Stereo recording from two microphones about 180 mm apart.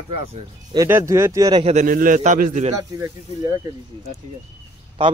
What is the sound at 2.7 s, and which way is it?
Speech, 15° right (ahead or behind).